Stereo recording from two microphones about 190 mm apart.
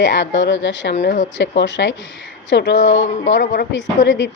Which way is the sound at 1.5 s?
65° left (ahead or behind).